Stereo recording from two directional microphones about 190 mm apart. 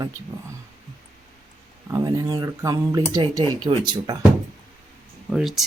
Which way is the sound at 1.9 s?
15° right (ahead or behind).